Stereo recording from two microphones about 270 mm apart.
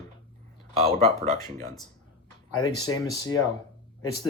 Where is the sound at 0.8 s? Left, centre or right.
Right.